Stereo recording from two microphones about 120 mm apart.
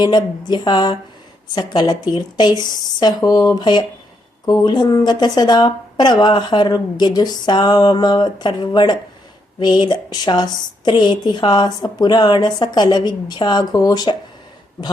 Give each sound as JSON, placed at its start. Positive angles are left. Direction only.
{"t": 0.0, "sound": "speech", "side_deg": 35}